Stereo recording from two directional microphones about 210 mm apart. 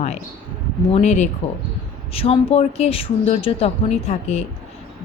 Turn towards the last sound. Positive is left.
turn(degrees=30)  # may be behind; listen again after turning